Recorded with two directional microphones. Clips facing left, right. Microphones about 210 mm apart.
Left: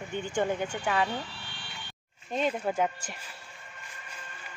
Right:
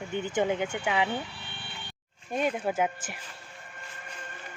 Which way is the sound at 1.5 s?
55° right (ahead or behind).